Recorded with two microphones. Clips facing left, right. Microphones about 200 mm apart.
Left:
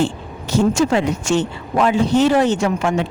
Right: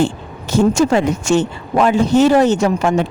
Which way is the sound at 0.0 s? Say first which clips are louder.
Right 3 dB; 50° right (ahead or behind).